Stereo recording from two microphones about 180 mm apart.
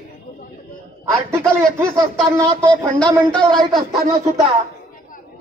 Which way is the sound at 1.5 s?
15° right (ahead or behind).